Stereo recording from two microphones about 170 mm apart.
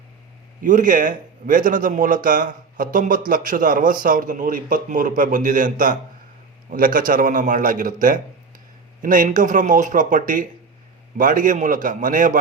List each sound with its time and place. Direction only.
0.6 s speech: 50° right (ahead or behind)